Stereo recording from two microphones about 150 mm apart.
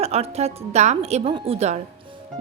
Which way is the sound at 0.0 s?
45° right (ahead or behind).